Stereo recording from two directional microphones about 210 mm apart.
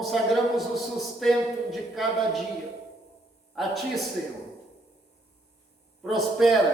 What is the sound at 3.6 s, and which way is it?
Speech, centre (ahead or behind).